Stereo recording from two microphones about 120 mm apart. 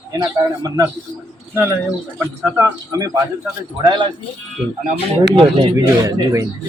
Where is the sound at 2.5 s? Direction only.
30° right (ahead or behind).